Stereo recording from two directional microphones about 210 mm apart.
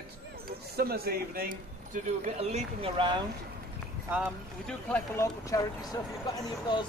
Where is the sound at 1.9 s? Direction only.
30° right (ahead or behind).